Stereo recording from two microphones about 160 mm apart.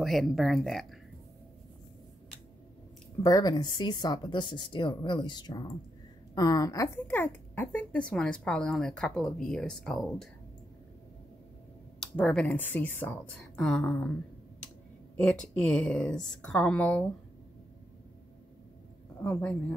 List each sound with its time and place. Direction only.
0.0 s speech: centre (ahead or behind)
3.3 s a woman's voice: 25° left (ahead or behind); by 10.1 s 5° left (ahead or behind)
12.0 s speech: 5° left (ahead or behind)
15.5 s speech: 5° left (ahead or behind)
19.2 s speech: 10° left (ahead or behind)